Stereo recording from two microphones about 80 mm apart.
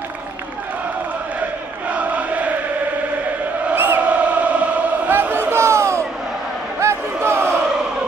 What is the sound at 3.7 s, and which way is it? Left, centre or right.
Chant, right.